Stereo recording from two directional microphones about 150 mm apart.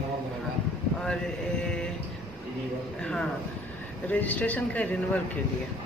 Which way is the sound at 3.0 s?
5° left (ahead or behind).